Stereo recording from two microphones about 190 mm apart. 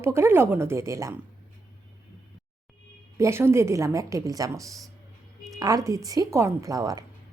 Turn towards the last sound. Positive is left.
turn(degrees=-20)  # may be behind; listen again after turning